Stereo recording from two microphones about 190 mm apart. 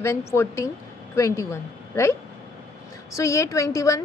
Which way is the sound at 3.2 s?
15° left (ahead or behind).